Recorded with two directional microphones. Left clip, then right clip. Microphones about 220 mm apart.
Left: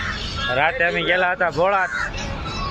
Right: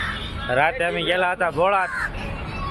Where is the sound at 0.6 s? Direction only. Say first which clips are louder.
Left 1 dB; 15° right (ahead or behind).